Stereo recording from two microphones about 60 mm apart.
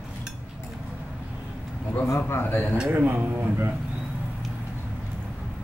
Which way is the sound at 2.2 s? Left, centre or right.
Left.